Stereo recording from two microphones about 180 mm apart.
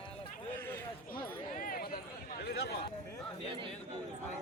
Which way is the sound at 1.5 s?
50° left (ahead or behind).